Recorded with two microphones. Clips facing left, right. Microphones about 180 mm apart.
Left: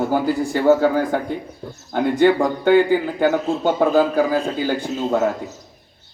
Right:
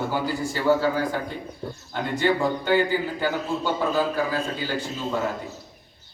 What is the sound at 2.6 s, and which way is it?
A man's voice, 55° left (ahead or behind).